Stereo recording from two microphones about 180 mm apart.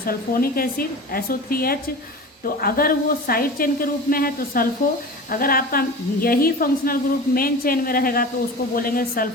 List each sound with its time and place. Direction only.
0.0 s a woman's voice: 55° left (ahead or behind)